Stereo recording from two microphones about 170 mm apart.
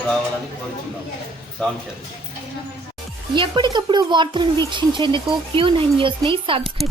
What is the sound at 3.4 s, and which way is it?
Speech, 25° right (ahead or behind).